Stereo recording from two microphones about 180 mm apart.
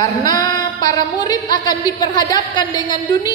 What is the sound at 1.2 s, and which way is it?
A woman's voice, 20° left (ahead or behind).